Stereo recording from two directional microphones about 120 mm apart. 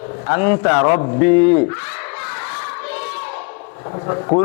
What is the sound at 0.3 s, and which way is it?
A man's voice, 20° left (ahead or behind).